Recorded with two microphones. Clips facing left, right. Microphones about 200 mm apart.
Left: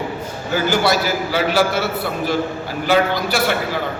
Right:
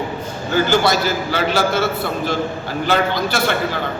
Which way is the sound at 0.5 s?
10° left (ahead or behind).